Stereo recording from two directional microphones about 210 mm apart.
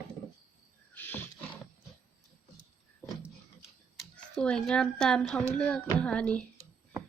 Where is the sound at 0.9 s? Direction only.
10° left (ahead or behind).